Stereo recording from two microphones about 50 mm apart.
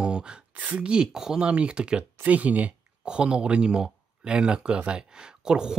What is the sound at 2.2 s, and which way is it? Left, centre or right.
Speech, right.